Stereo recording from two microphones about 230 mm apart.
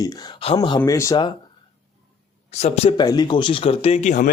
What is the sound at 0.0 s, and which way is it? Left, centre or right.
Speech, left.